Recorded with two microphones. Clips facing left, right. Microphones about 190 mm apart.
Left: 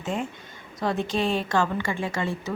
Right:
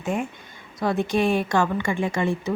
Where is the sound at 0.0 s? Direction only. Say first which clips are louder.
Right 3 dB; 10° right (ahead or behind).